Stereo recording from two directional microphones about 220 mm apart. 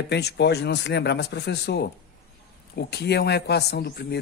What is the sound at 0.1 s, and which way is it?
Speech, 50° left (ahead or behind).